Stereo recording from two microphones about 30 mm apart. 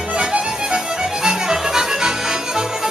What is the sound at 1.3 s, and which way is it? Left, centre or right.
Music, right.